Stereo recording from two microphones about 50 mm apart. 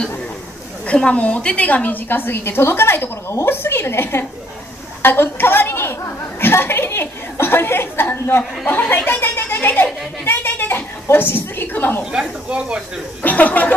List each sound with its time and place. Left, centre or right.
0.8 s a woman's voice: left
12.1 s speech: centre
13.2 s a woman's voice: left